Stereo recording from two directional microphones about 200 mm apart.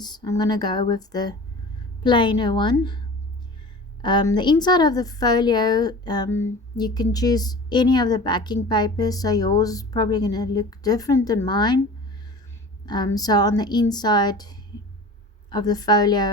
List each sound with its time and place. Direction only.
0.0 s a woman's voice: 20° left (ahead or behind)
4.0 s a woman's voice: 20° left (ahead or behind)
12.8 s a woman's voice: 20° left (ahead or behind)